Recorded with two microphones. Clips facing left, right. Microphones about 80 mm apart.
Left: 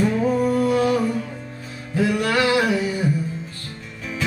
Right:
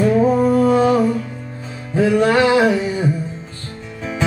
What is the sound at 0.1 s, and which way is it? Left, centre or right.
Music, right.